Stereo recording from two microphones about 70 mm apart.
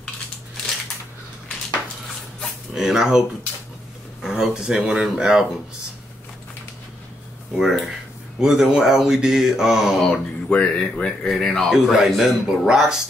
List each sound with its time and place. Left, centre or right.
2.7 s speech: centre
7.5 s speech: centre
10.1 s speech: centre
11.1 s speech: centre